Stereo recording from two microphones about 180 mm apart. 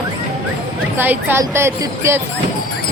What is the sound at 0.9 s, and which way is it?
Speech, 10° right (ahead or behind).